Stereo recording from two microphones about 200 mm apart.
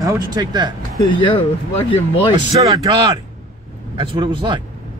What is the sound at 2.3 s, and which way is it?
Speech, 20° right (ahead or behind).